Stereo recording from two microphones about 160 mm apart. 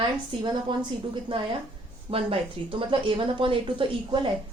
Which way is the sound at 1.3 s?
30° right (ahead or behind).